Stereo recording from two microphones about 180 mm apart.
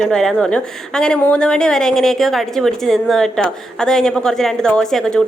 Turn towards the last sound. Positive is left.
turn(degrees=5)  # may be behind; listen again after turning